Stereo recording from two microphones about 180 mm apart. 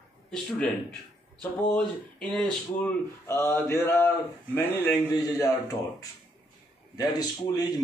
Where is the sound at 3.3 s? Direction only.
15° left (ahead or behind).